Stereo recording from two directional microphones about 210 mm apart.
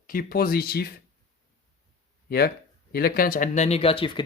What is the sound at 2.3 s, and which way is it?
Speech, 50° left (ahead or behind).